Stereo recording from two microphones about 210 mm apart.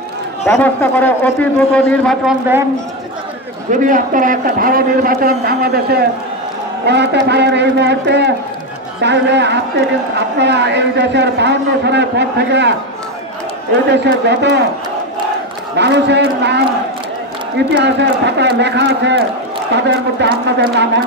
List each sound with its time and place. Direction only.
0.5 s a man's voice: 10° left (ahead or behind)
3.7 s a man's voice: 40° right (ahead or behind); by 12.7 s 55° right (ahead or behind)
13.8 s a woman's voice: 55° right (ahead or behind)
15.7 s a man's voice: 55° right (ahead or behind)